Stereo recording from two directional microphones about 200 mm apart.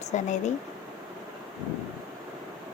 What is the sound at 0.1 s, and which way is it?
Speech, 35° left (ahead or behind).